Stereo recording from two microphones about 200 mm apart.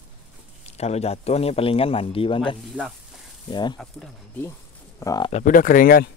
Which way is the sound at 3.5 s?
20° left (ahead or behind).